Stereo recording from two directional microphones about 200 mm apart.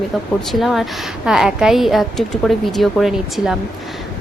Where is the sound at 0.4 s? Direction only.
Centre (ahead or behind).